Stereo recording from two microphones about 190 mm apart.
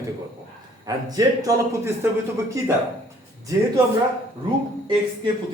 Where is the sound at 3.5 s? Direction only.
15° right (ahead or behind).